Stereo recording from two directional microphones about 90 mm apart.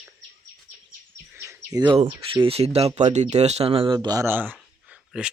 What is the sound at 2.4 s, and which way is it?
Speech, 90° right.